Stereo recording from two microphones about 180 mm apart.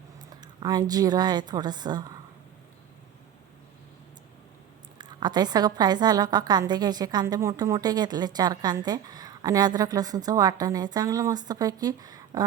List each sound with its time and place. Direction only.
0.4 s a woman's voice: 20° right (ahead or behind)
4.9 s a woman's voice: 25° right (ahead or behind)